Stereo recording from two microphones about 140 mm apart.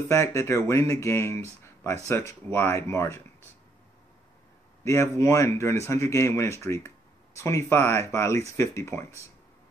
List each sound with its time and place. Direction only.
0.1 s speech: 20° left (ahead or behind)
1.6 s a sound: 20° left (ahead or behind)
2.0 s speech: 20° left (ahead or behind)
4.8 s speech: 20° left (ahead or behind)